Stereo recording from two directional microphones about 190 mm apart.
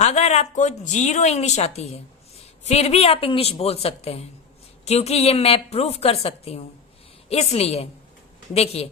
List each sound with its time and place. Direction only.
0.0 s speech: 35° left (ahead or behind)